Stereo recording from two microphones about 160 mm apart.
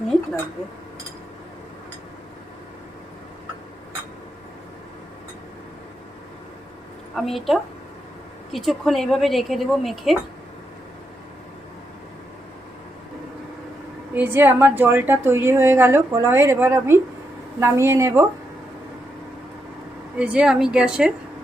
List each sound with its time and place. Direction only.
7.2 s speech: centre (ahead or behind)
14.1 s a woman's voice: 10° right (ahead or behind)
20.1 s speech: 5° right (ahead or behind)